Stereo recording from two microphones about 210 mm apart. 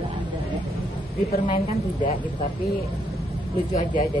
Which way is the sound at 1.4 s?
35° left (ahead or behind).